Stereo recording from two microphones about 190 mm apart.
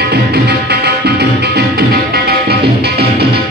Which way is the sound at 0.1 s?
60° right (ahead or behind).